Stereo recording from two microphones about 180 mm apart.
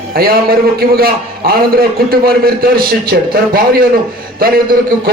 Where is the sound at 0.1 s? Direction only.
55° right (ahead or behind).